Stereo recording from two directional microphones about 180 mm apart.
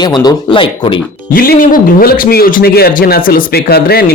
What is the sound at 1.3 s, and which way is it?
A man's voice, 55° left (ahead or behind).